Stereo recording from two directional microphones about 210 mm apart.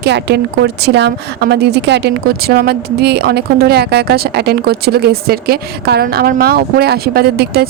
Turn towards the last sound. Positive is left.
turn(degrees=-50)  # may be behind; listen again after turning